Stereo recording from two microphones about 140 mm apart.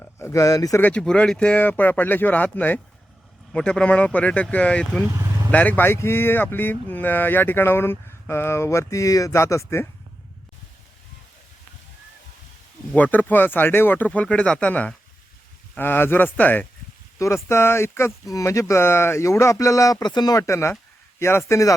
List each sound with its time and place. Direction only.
0.0 s speech: 20° left (ahead or behind)
0.8 s speech: 10° left (ahead or behind)
5.0 s vehicle: 20° right (ahead or behind)
5.5 s speech: 10° left (ahead or behind)
12.9 s speech: 10° left (ahead or behind)